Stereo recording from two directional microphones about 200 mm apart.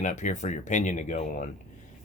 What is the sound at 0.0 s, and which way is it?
Speech, 40° left (ahead or behind).